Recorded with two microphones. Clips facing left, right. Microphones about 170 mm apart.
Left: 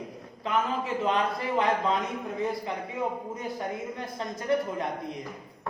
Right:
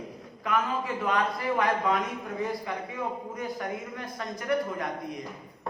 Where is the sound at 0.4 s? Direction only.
25° left (ahead or behind).